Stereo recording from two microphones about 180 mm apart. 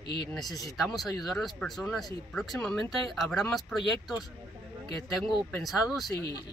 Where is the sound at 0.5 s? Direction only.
20° left (ahead or behind).